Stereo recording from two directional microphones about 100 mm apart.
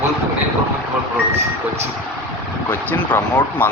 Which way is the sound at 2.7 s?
15° left (ahead or behind).